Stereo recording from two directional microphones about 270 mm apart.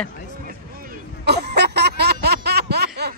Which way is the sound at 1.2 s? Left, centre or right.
Right.